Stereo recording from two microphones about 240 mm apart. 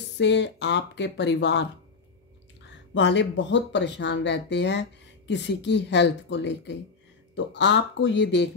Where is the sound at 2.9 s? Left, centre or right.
Left.